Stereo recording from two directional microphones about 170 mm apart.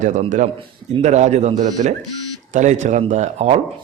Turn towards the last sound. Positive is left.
turn(degrees=-40)  # may be behind; listen again after turning